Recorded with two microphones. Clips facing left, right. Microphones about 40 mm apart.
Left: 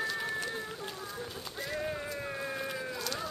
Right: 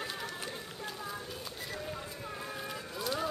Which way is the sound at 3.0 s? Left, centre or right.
Centre.